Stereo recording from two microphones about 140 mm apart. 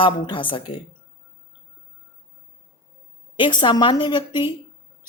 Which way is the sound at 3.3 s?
35° left (ahead or behind).